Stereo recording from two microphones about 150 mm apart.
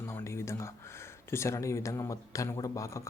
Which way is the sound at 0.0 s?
15° left (ahead or behind).